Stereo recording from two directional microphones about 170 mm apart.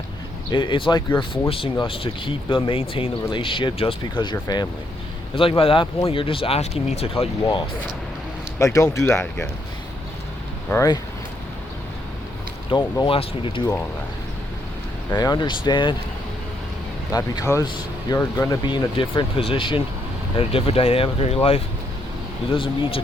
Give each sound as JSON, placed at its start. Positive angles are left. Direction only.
{"t": 0.5, "sound": "speech", "side_deg": 30}
{"t": 8.5, "sound": "speech", "side_deg": 20}
{"t": 10.7, "sound": "speech", "side_deg": 20}
{"t": 12.7, "sound": "speech", "side_deg": 30}
{"t": 15.1, "sound": "speech", "side_deg": 25}
{"t": 17.1, "sound": "speech", "side_deg": 20}